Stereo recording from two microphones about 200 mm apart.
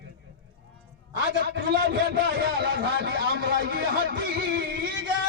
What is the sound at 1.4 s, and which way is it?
A man's voice, 60° right (ahead or behind).